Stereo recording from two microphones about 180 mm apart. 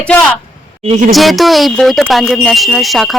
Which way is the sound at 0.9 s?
45° right (ahead or behind).